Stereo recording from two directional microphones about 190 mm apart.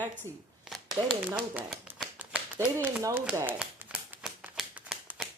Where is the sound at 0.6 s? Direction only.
Centre (ahead or behind).